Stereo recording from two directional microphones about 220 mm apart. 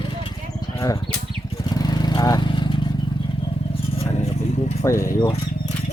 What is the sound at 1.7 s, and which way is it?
Vehicle, 20° left (ahead or behind).